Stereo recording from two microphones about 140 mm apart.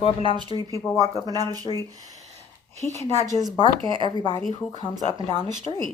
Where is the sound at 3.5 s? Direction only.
35° left (ahead or behind).